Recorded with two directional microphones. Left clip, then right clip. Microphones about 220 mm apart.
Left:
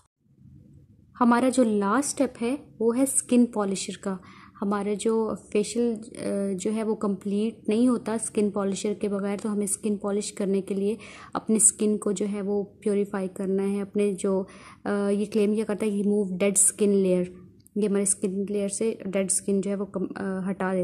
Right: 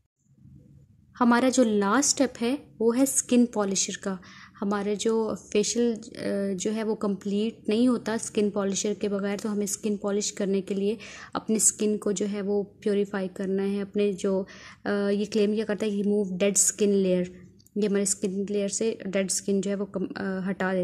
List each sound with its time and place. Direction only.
1.1 s a woman's voice: 15° right (ahead or behind)